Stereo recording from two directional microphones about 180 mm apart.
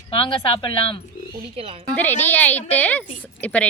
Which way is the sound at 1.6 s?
35° right (ahead or behind).